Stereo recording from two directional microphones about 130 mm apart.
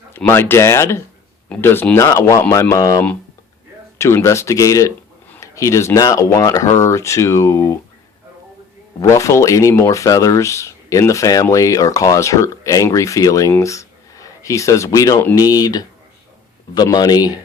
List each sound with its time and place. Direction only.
0.3 s speech: 20° left (ahead or behind)
9.0 s a man's voice: 25° left (ahead or behind)